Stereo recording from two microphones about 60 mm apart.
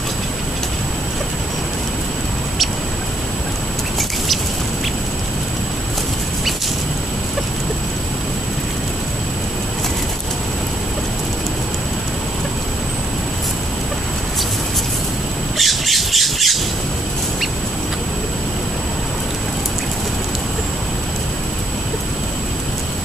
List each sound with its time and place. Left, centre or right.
15.5 s squawk: centre